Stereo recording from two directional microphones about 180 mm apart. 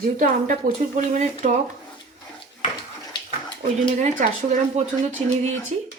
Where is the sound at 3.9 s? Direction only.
40° right (ahead or behind).